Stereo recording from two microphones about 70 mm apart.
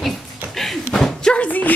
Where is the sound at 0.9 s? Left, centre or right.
Centre.